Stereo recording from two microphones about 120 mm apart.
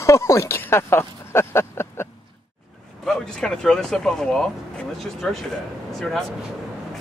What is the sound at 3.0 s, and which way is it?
Speech, 5° left (ahead or behind).